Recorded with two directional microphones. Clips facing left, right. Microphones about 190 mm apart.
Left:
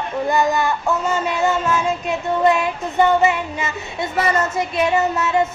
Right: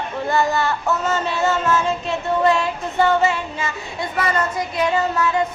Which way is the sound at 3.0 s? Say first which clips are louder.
Left 2 dB; 20° left (ahead or behind).